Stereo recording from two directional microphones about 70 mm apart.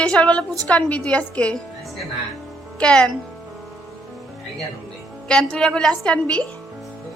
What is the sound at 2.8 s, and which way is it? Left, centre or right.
Speech, centre.